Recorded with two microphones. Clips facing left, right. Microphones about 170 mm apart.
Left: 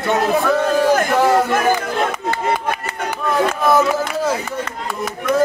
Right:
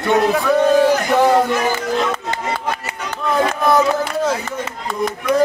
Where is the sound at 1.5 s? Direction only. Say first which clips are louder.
Left 1 dB; 50° left (ahead or behind).